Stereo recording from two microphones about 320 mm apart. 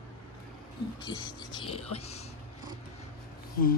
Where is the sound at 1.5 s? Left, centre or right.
Centre.